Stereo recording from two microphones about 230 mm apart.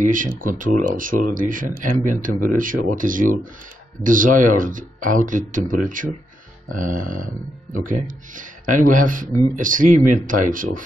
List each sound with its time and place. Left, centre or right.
0.0 s speech: right
8.4 s speech: right